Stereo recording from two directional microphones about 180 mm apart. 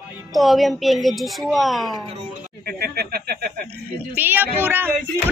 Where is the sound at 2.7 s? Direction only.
60° right (ahead or behind).